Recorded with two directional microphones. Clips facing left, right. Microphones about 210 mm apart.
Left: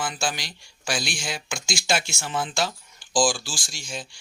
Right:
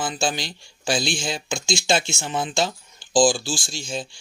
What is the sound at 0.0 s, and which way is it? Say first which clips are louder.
Speech: right 4 dB; 25° right (ahead or behind).